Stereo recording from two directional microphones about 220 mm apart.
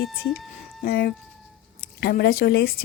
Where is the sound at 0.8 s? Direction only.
45° left (ahead or behind).